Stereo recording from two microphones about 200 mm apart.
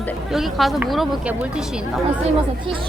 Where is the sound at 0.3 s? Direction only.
Centre (ahead or behind).